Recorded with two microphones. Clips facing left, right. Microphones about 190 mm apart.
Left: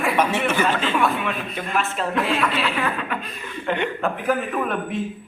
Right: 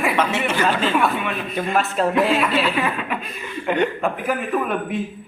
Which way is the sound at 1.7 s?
40° right (ahead or behind).